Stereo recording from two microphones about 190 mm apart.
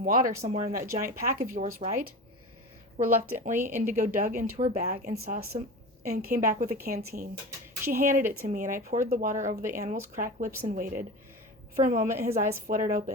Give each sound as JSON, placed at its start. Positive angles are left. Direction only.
{"t": 0.0, "sound": "speech", "side_deg": -45}